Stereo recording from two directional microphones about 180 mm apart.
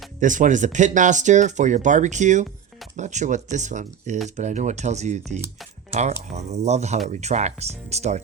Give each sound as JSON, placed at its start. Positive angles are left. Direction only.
{"t": 0.2, "sound": "speech", "side_deg": -45}